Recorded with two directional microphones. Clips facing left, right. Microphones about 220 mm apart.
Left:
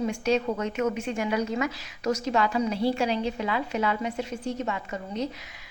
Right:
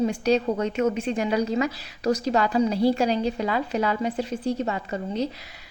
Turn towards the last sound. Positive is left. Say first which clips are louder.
# right 4 dB
turn(degrees=-30)  # may be behind; listen again after turning